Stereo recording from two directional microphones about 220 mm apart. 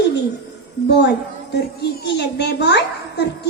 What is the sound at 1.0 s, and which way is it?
A woman's voice, 50° left (ahead or behind).